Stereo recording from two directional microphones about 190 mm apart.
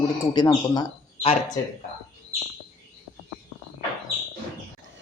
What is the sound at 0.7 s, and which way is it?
Bird, 20° left (ahead or behind).